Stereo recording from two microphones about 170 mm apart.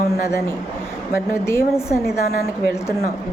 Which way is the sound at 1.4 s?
15° left (ahead or behind).